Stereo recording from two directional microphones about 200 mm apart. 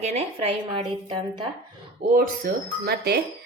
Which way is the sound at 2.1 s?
45° right (ahead or behind).